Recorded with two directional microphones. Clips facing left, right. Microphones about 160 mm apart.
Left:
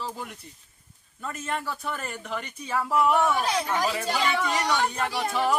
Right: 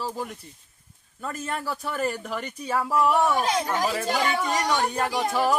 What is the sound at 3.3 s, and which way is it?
Speech, 45° right (ahead or behind).